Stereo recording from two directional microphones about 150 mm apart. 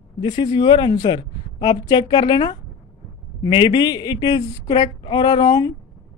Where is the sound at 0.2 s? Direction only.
30° left (ahead or behind).